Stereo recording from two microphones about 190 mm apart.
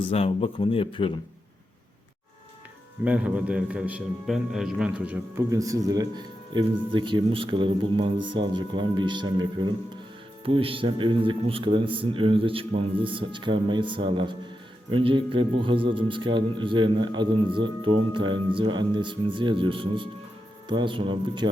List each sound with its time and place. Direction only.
0.0 s speech: 30° left (ahead or behind)
3.0 s a man's voice: 5° right (ahead or behind); by 21.5 s 25° right (ahead or behind)